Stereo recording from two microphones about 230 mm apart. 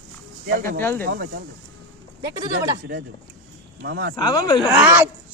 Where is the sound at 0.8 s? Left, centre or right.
Centre.